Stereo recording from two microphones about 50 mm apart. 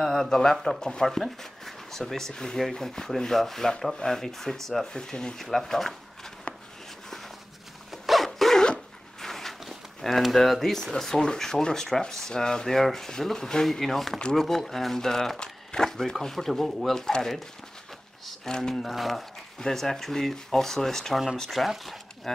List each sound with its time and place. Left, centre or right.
0.0 s speech: centre
4.9 s speech: centre
6.5 s a sound: left
7.9 s dog: centre
9.2 s speech: centre